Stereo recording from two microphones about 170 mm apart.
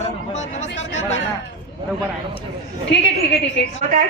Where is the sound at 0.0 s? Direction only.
45° left (ahead or behind).